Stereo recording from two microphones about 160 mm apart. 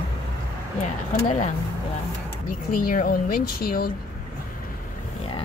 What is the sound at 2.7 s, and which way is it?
Speech, 65° left (ahead or behind).